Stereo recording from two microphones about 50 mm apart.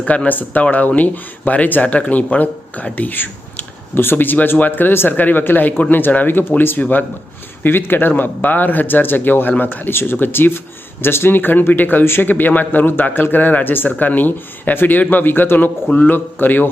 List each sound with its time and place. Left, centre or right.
0.0 s speech: left
12.3 s speech: left